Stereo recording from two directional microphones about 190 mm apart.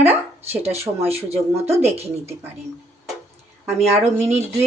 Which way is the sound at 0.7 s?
30° right (ahead or behind).